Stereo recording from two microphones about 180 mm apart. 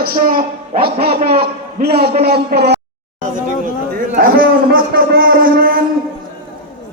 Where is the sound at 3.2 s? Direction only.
50° right (ahead or behind).